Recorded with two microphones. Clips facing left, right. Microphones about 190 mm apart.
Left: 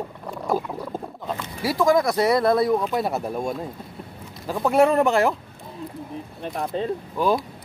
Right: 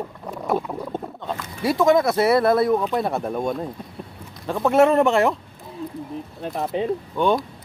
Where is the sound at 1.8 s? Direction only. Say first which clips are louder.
Right 1 dB; 25° right (ahead or behind).